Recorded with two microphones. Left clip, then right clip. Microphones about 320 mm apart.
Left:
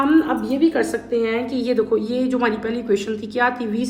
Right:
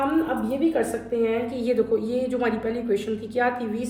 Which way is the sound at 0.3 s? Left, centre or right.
Left.